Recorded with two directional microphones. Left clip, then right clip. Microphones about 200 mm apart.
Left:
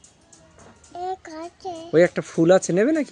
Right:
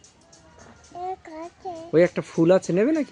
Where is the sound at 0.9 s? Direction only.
25° left (ahead or behind).